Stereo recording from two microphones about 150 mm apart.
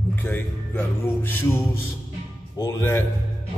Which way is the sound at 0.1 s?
15° left (ahead or behind).